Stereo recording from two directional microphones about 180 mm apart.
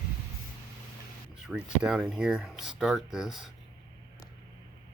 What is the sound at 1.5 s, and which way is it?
Speech, 5° right (ahead or behind).